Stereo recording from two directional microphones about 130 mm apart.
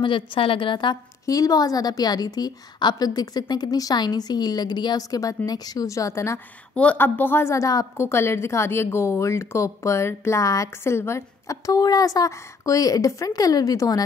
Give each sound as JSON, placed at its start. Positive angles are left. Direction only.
{"t": 0.0, "sound": "a woman's voice", "side_deg": 40}
{"t": 6.7, "sound": "a woman's voice", "side_deg": 10}